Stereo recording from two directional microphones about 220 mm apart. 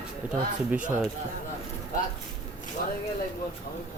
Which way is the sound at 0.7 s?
5° right (ahead or behind).